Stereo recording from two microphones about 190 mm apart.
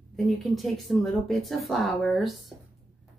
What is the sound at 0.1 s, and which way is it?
Speech, centre (ahead or behind).